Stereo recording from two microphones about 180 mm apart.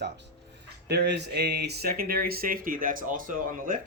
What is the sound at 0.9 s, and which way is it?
Speech, 65° right (ahead or behind).